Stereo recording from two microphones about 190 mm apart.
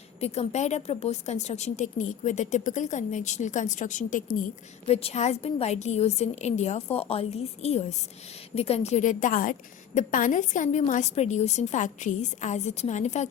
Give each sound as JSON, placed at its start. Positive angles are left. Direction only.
{"t": 0.2, "sound": "a woman's voice", "side_deg": 35}
{"t": 4.9, "sound": "a woman's voice", "side_deg": 30}